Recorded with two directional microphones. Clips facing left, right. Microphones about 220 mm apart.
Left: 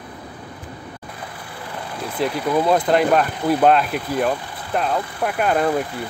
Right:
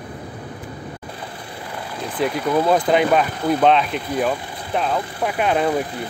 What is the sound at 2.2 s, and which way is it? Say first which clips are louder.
Speech: right 1 dB; centre (ahead or behind).